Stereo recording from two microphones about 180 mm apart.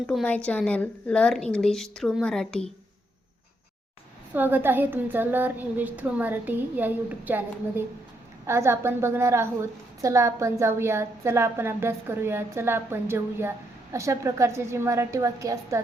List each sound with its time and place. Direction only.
0.1 s a woman's voice: 5° left (ahead or behind)
4.4 s a woman's voice: 10° right (ahead or behind)
8.4 s a woman's voice: 15° right (ahead or behind)